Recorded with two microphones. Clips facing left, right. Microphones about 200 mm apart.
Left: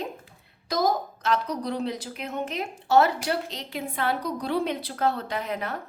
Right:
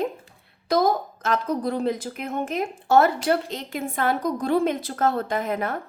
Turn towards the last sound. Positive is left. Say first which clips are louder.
# right 5 dB
turn(degrees=-50)  # may be behind; listen again after turning